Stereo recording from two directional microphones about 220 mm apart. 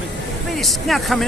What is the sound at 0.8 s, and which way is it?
Speech, centre (ahead or behind).